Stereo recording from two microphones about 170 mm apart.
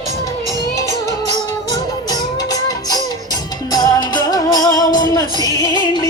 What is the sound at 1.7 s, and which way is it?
Music, 20° left (ahead or behind).